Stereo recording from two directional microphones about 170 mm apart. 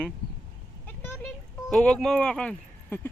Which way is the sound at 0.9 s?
10° left (ahead or behind).